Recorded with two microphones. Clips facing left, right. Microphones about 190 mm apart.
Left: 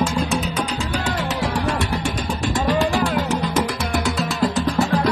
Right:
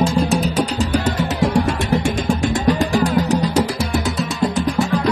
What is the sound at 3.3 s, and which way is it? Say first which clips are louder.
Music: right 4 dB; 35° right (ahead or behind).